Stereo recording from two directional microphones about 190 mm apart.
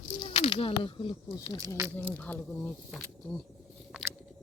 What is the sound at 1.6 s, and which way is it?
Speech, 20° right (ahead or behind).